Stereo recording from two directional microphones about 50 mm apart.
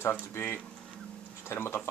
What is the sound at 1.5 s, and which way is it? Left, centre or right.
Speech, left.